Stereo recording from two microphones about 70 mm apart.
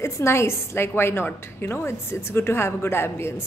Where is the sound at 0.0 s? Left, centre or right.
Left.